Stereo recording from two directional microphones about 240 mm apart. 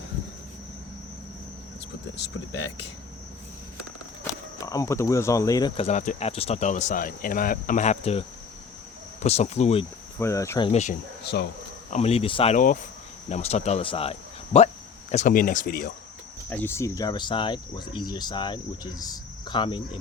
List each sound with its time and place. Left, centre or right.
4.6 s speech: centre
9.2 s speech: left
10.2 s speech: centre
10.7 s speech: left
11.2 s speech: left
11.9 s speech: left
16.5 s speech: centre